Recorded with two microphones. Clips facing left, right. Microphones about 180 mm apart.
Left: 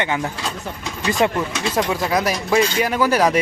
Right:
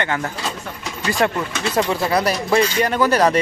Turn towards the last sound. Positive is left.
turn(degrees=10)  # may be behind; listen again after turning